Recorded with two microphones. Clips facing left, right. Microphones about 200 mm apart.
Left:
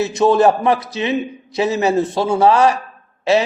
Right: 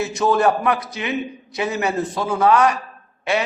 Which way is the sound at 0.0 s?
25° left (ahead or behind).